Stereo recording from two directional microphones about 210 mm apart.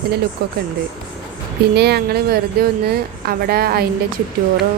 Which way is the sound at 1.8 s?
50° right (ahead or behind).